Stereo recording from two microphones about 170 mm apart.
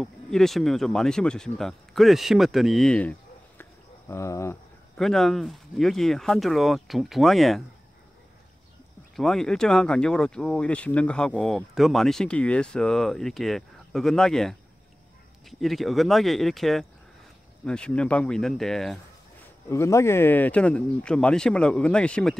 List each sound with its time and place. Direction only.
0.0 s speech: centre (ahead or behind)
4.9 s speech: centre (ahead or behind)
9.1 s speech: centre (ahead or behind)
15.6 s speech: centre (ahead or behind)
19.7 s speech: 15° left (ahead or behind)